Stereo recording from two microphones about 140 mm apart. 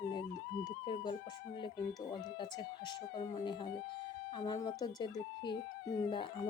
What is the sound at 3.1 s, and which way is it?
Speech, 35° left (ahead or behind).